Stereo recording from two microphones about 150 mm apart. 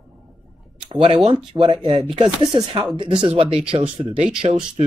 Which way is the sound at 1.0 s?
40° right (ahead or behind).